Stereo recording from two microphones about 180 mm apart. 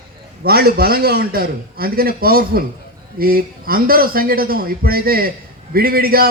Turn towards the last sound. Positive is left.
turn(degrees=-55)  # may be behind; listen again after turning